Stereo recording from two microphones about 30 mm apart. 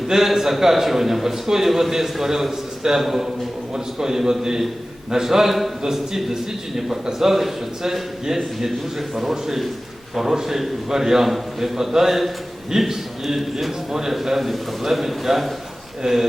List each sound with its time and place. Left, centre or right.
0.1 s a man's voice: centre
16.0 s speech: right